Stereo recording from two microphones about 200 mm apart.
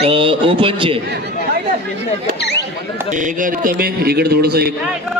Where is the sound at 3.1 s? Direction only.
40° right (ahead or behind).